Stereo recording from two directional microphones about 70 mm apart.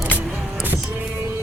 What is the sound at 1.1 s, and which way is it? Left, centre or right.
Music, right.